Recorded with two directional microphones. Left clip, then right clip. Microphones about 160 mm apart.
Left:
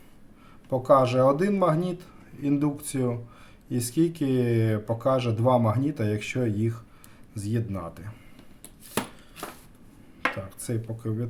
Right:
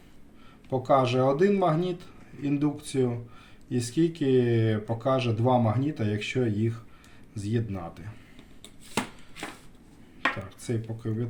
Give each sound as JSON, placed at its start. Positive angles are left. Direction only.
{"t": 0.7, "sound": "speech", "side_deg": 30}
{"t": 10.2, "sound": "speech", "side_deg": 30}